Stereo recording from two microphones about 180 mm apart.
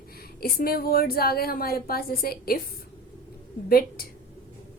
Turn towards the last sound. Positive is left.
turn(degrees=55)  # may be behind; listen again after turning